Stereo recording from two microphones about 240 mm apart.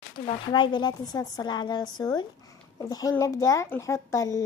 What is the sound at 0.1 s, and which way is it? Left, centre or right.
A child's voice, centre.